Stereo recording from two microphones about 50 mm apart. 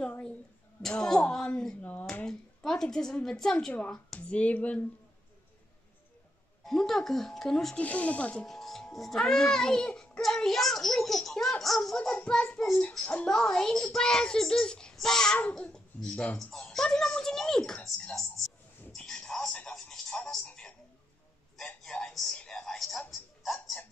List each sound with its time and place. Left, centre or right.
0.8 s a child's voice: centre
1.8 s speech: left
2.2 s a woman's voice: centre
4.3 s speech: left
6.6 s a child's voice: centre
7.7 s speech: left
8.5 s a child's voice: centre
10.2 s a child's voice: centre
17.8 s a sound: centre
18.9 s a sound: centre
19.5 s music: centre
20.4 s a sound: left
22.6 s television: centre